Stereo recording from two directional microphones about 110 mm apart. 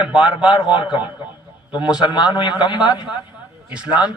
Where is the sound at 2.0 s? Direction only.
40° left (ahead or behind).